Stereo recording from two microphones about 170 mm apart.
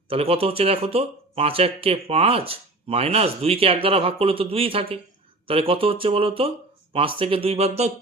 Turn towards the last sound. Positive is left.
turn(degrees=-35)  # may be behind; listen again after turning